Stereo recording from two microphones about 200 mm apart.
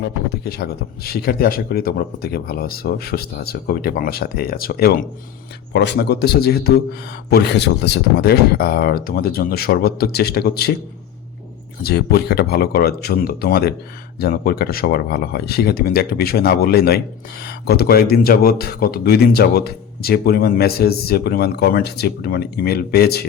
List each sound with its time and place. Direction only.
0.0 s speech: 50° left (ahead or behind)
11.8 s speech: 50° left (ahead or behind)